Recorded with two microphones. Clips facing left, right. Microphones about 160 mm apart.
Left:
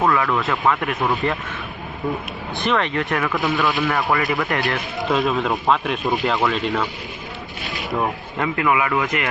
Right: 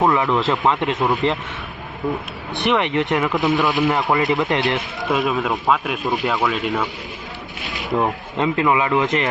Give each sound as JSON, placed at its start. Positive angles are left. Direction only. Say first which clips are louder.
{"t": 0.0, "sound": "speech", "louder": "right 2 dB", "side_deg": -20}
{"t": 2.6, "sound": "speech", "louder": "right 3 dB", "side_deg": -20}
{"t": 5.1, "sound": "speech", "louder": "even", "side_deg": -5}
{"t": 7.7, "sound": "speech", "louder": "right 3 dB", "side_deg": -20}